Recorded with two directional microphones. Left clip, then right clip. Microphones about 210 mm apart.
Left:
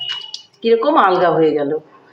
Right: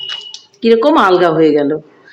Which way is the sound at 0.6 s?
45° right (ahead or behind).